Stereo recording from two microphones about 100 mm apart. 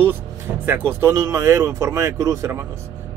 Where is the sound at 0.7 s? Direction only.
25° right (ahead or behind).